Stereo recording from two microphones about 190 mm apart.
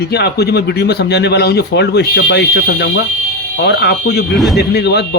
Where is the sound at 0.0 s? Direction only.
60° left (ahead or behind).